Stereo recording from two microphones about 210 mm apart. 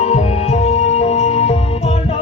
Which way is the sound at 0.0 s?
30° left (ahead or behind).